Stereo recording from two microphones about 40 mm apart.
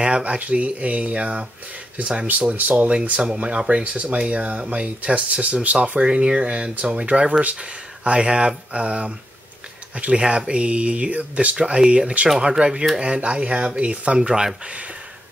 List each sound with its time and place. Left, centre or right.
0.0 s speech: right
2.5 s speech: right
3.4 s speech: right
11.5 s speech: right
14.1 s speech: centre